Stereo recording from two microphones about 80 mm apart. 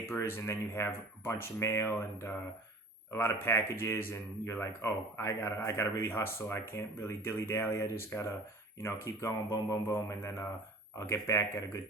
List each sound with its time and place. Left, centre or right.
0.0 s speech: left